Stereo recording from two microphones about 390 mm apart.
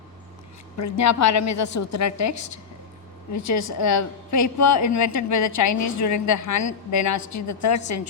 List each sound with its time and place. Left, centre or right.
0.8 s a woman's voice: left